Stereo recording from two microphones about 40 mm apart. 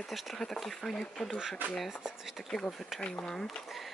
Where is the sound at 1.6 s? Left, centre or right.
Right.